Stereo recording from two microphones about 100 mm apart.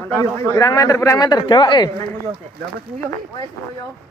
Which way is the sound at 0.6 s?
35° left (ahead or behind).